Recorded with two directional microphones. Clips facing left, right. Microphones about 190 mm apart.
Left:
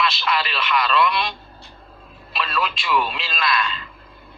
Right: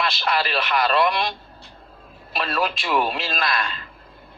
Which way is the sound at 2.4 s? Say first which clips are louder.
Right 1 dB; 45° right (ahead or behind).